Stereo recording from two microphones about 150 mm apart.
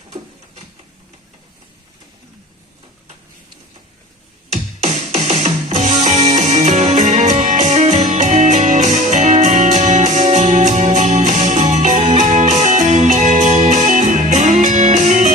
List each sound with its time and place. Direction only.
4.5 s music: 50° right (ahead or behind)